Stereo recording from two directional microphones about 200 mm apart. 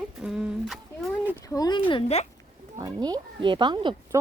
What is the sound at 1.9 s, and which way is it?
Speech, 30° left (ahead or behind).